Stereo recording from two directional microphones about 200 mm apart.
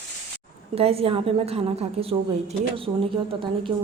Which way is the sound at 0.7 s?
30° right (ahead or behind).